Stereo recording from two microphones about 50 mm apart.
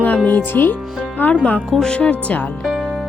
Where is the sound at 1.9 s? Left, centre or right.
Left.